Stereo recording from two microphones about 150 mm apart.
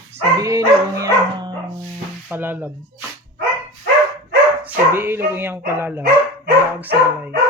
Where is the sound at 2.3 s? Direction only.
10° right (ahead or behind).